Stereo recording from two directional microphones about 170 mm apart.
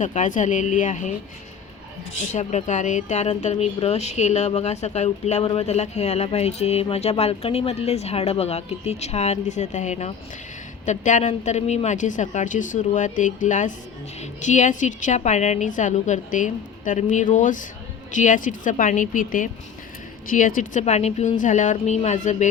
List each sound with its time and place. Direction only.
0.0 s a woman's voice: 45° left (ahead or behind)
2.3 s a woman's voice: 45° left (ahead or behind)